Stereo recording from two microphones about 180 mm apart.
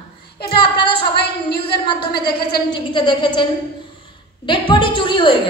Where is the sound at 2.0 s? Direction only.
60° left (ahead or behind).